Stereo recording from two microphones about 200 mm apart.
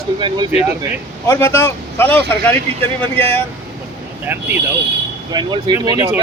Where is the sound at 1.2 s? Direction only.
15° left (ahead or behind).